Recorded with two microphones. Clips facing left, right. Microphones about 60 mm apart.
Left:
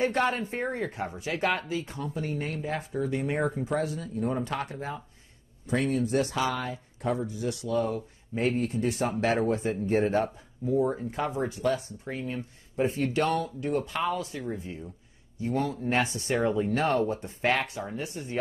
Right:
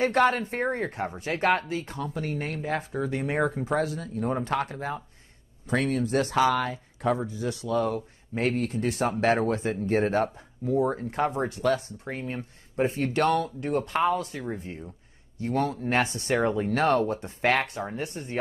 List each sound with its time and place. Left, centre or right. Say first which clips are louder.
0.1 s speech: right 4 dB; right
5.7 s speech: right 1 dB; right
7.2 s speech: right 1 dB; right
12.1 s speech: even; right
15.3 s speech: right 2 dB; right
16.3 s speech: right 1 dB; right
16.7 s speech: right 6 dB; right
17.5 s speech: right 2 dB; right